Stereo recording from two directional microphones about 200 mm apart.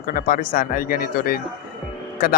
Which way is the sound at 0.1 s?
45° left (ahead or behind).